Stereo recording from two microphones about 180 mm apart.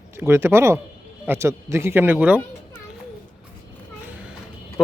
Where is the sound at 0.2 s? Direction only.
10° right (ahead or behind).